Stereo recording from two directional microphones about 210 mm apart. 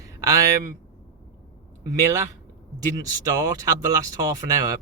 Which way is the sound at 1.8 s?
15° right (ahead or behind).